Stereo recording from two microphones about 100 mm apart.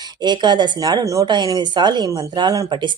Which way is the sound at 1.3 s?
45° right (ahead or behind).